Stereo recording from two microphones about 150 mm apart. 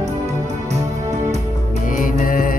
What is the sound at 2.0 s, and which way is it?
Mantra, 65° left (ahead or behind).